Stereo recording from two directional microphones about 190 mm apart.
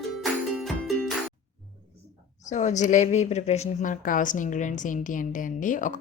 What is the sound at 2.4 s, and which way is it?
A woman's voice, 40° left (ahead or behind).